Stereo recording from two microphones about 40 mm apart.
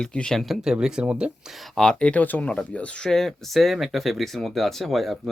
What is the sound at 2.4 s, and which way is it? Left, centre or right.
Speech, left.